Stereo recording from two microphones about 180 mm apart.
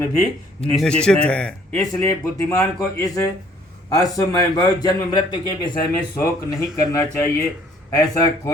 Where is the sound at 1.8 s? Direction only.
15° left (ahead or behind).